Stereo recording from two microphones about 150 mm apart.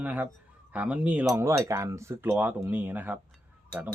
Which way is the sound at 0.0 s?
10° right (ahead or behind).